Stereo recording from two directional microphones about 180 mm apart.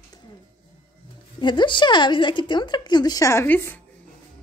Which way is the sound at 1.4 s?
25° left (ahead or behind).